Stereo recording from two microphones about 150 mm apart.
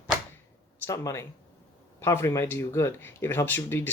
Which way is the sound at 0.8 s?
20° left (ahead or behind).